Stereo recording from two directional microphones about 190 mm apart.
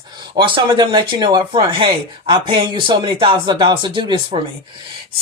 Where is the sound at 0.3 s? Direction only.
25° right (ahead or behind).